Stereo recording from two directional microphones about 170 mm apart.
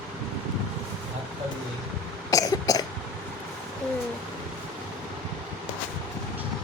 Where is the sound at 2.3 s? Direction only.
20° left (ahead or behind).